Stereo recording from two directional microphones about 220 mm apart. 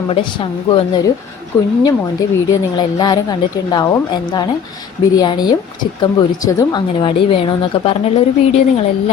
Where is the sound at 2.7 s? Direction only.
20° left (ahead or behind).